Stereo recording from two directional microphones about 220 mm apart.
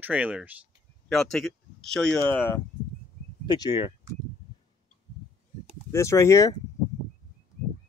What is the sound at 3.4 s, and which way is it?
Speech, 20° left (ahead or behind).